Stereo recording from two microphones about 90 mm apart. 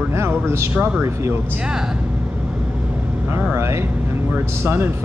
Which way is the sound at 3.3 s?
30° right (ahead or behind).